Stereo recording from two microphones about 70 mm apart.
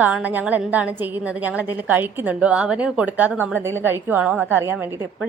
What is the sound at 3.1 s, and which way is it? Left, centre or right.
A woman's voice, right.